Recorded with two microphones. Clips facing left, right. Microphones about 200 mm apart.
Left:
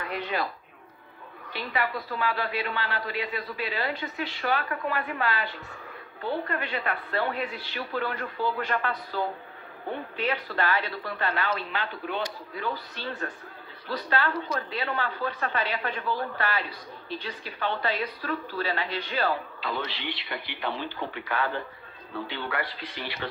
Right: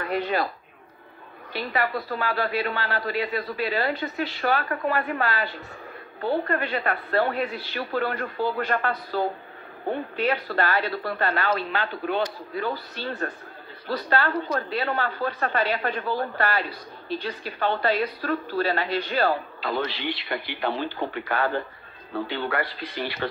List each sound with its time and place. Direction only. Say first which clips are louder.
0.0 s speech: right 5 dB; 40° right (ahead or behind)
1.5 s a woman's voice: right 4 dB; 40° right (ahead or behind)